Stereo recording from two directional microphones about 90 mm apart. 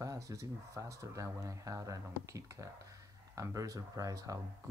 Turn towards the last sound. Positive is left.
turn(degrees=-40)  # may be behind; listen again after turning